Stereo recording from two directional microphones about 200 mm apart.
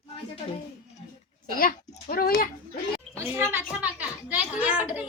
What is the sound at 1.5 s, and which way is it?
Speech, 45° left (ahead or behind).